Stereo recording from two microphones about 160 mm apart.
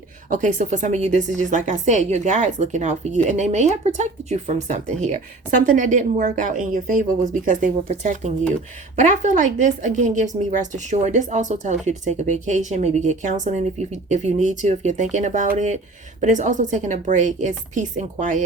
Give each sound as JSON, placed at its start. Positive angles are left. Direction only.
{"t": 0.3, "sound": "speech", "side_deg": -50}